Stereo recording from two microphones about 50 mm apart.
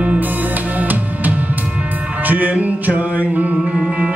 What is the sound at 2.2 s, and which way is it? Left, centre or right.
Music, right.